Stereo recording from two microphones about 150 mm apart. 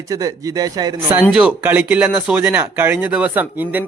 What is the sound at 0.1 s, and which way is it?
Speech, 25° right (ahead or behind).